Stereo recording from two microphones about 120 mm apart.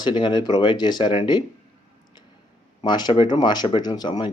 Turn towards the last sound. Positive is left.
turn(degrees=35)  # may be behind; listen again after turning